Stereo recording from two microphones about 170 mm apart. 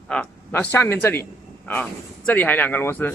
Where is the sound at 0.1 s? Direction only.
5° left (ahead or behind).